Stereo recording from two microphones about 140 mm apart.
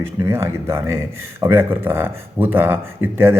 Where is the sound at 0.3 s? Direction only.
20° right (ahead or behind).